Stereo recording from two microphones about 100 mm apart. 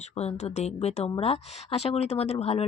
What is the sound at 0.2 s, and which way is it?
Speech, 90° left.